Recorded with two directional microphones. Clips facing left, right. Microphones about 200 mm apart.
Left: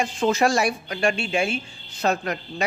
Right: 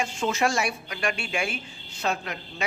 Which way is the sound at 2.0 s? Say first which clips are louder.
Left 6 dB; 40° left (ahead or behind).